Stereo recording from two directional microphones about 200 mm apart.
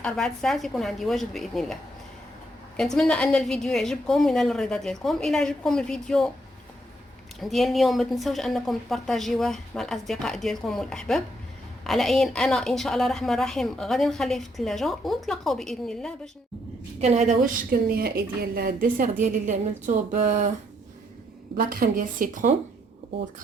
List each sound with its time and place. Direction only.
0.0 s a woman's voice: centre (ahead or behind)
7.3 s a woman's voice: centre (ahead or behind)
17.0 s a woman's voice: 35° right (ahead or behind)
21.5 s a woman's voice: 45° right (ahead or behind)